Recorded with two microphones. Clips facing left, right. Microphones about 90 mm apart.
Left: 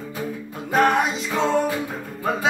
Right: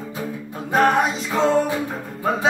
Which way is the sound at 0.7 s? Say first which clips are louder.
Right 1 dB; 35° right (ahead or behind).